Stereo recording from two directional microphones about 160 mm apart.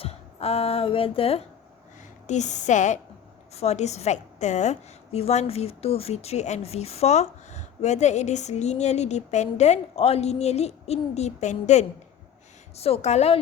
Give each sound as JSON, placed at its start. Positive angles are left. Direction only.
{"t": 0.0, "sound": "speech", "side_deg": 40}
{"t": 2.2, "sound": "a woman's voice", "side_deg": 50}